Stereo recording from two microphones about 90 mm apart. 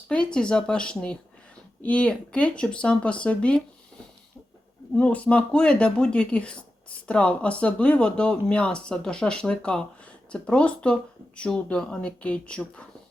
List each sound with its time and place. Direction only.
0.1 s speech: 10° left (ahead or behind)
4.9 s speech: 15° left (ahead or behind)